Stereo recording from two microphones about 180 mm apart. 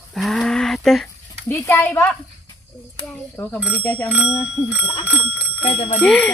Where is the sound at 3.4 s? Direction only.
10° left (ahead or behind).